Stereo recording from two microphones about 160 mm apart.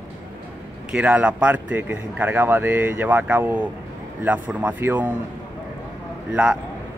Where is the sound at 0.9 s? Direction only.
10° right (ahead or behind).